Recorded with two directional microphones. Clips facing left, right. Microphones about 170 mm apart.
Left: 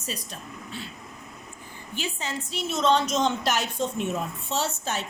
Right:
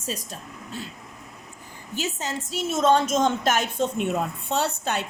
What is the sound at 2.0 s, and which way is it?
A woman's voice, 45° right (ahead or behind).